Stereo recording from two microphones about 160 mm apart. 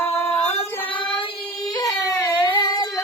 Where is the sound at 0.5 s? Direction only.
30° left (ahead or behind).